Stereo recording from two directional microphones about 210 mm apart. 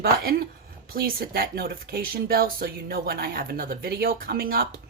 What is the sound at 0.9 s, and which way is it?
A woman's voice, 45° right (ahead or behind).